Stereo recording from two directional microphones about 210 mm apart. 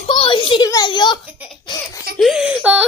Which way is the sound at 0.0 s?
25° left (ahead or behind).